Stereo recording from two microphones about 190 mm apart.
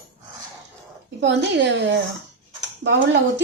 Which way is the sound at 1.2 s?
70° right (ahead or behind).